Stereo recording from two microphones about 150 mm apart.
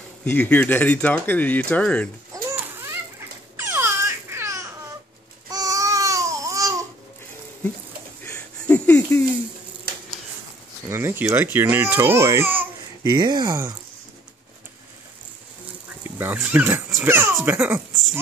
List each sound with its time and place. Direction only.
0.2 s speech: 10° left (ahead or behind)
2.3 s a sound: 15° right (ahead or behind)
5.5 s babbling: 25° right (ahead or behind)
8.2 s a sound: 10° left (ahead or behind)
10.9 s speech: 15° right (ahead or behind)
13.1 s speech: 30° right (ahead or behind)
16.2 s speech: 10° right (ahead or behind)